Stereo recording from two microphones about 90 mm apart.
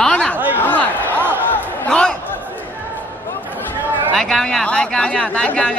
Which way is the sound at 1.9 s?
10° left (ahead or behind).